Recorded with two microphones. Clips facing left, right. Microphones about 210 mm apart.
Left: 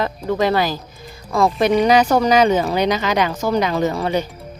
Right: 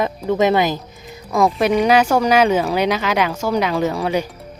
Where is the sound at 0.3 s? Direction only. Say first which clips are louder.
Right 2 dB; 20° right (ahead or behind).